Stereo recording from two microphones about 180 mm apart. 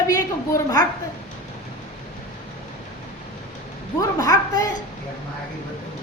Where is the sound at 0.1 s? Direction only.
20° left (ahead or behind).